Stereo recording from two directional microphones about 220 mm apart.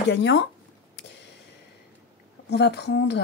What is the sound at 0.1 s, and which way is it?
Speech, 50° left (ahead or behind).